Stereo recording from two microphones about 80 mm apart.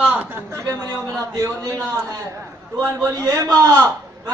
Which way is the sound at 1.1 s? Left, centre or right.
Right.